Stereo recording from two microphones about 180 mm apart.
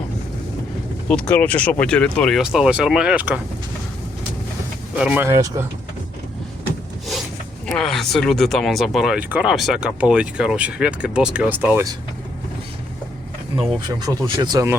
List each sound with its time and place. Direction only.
1.3 s speech: 10° left (ahead or behind); by 3.4 s 5° right (ahead or behind)
4.9 s speech: 10° right (ahead or behind)
7.7 s speech: centre (ahead or behind)
13.6 s speech: 25° right (ahead or behind)